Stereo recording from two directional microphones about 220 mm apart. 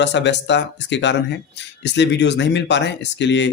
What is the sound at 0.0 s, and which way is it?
Speech, 55° left (ahead or behind).